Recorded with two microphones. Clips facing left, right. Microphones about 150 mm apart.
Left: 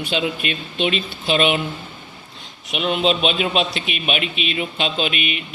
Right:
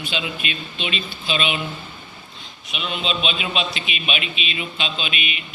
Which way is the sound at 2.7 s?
55° left (ahead or behind).